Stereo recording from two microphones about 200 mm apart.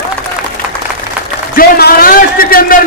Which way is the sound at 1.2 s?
5° right (ahead or behind).